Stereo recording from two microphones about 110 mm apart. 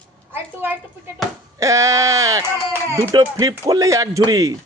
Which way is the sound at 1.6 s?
30° right (ahead or behind).